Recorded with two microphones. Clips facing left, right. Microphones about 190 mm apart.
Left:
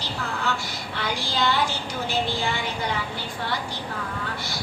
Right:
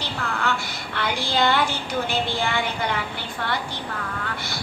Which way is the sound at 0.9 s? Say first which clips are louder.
Right 4 dB; 60° right (ahead or behind).